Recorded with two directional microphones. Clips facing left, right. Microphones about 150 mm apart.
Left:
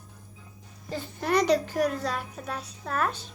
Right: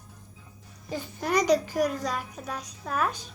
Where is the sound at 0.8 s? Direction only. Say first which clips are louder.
Left 1 dB; 10° right (ahead or behind).